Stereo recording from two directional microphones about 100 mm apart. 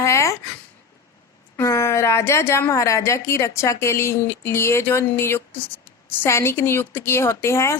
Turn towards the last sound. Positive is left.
turn(degrees=25)  # may be behind; listen again after turning